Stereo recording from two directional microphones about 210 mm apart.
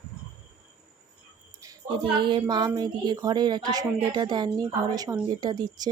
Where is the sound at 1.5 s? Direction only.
20° right (ahead or behind).